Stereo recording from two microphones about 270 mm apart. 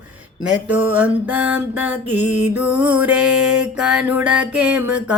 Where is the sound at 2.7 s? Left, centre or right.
Centre.